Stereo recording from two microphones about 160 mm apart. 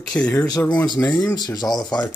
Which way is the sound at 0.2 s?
5° left (ahead or behind).